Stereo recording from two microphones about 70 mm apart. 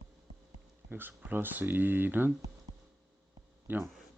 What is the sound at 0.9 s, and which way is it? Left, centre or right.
Speech, right.